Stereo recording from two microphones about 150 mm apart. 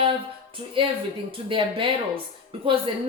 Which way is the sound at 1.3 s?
35° right (ahead or behind).